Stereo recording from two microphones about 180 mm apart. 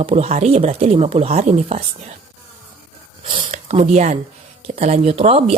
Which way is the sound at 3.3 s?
30° right (ahead or behind).